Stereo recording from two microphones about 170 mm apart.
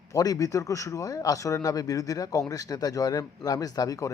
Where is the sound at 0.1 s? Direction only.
20° left (ahead or behind).